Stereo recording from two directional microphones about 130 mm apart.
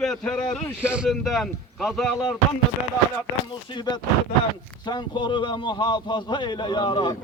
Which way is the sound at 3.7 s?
35° left (ahead or behind).